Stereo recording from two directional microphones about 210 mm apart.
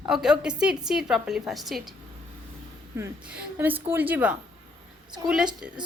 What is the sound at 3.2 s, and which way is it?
A woman's voice, 5° right (ahead or behind).